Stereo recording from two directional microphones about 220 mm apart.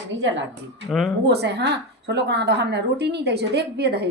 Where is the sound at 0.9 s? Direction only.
Centre (ahead or behind).